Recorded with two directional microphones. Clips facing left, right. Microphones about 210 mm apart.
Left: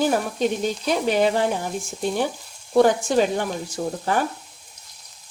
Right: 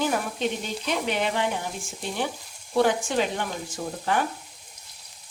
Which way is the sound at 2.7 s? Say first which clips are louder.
Left 5 dB; 40° left (ahead or behind).